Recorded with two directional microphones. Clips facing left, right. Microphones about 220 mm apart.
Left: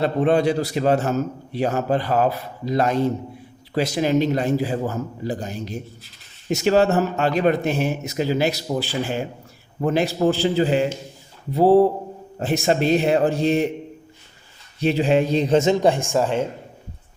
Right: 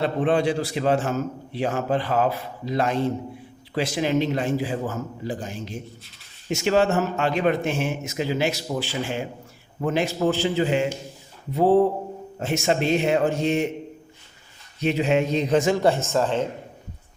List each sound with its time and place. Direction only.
0.0 s a man's voice: 40° left (ahead or behind)
14.8 s a man's voice: 35° left (ahead or behind); by 16.5 s 10° left (ahead or behind)